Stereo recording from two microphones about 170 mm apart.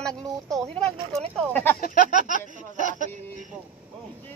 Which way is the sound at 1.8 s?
55° left (ahead or behind).